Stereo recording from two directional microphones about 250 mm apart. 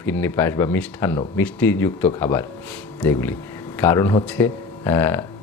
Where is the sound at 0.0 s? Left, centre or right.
Centre.